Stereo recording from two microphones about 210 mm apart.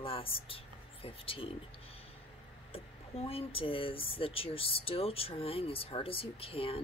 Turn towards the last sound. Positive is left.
turn(degrees=25)  # may be behind; listen again after turning